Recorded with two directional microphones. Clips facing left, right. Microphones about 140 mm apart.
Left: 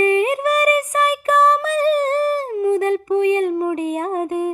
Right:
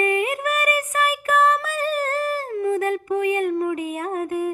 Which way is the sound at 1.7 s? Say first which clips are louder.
Left 7 dB; 30° left (ahead or behind).